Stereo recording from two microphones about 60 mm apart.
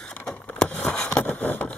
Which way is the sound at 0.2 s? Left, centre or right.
Centre.